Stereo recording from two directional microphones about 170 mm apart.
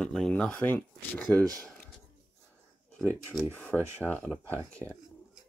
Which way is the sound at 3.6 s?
10° left (ahead or behind).